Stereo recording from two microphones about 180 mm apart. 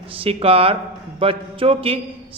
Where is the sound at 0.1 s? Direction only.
30° right (ahead or behind).